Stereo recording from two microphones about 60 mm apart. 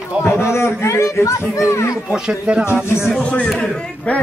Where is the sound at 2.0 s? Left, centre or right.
Centre.